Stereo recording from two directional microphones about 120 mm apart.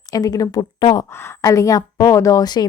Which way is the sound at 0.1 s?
30° left (ahead or behind).